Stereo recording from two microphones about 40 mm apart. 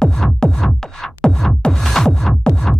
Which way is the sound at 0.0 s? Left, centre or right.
Centre.